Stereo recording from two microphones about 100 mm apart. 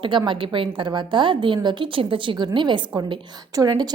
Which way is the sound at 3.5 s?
40° right (ahead or behind).